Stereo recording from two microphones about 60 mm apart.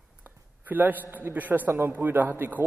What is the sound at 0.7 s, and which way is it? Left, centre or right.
A man's voice, right.